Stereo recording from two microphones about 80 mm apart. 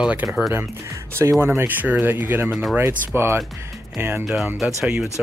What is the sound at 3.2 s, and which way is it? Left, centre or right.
Speech, right.